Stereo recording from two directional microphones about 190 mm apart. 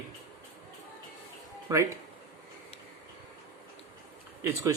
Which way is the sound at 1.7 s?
20° right (ahead or behind).